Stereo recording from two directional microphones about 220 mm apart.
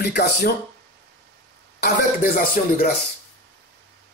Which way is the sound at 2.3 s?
40° left (ahead or behind).